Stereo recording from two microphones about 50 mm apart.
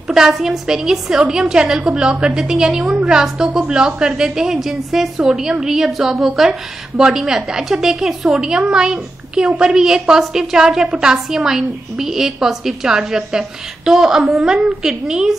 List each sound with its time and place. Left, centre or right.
0.1 s a woman's voice: centre